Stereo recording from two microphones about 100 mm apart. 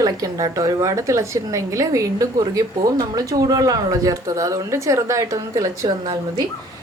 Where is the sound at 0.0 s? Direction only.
35° right (ahead or behind).